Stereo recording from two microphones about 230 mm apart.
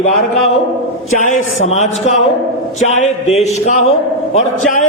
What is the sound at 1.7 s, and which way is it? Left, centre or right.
A man's voice, left.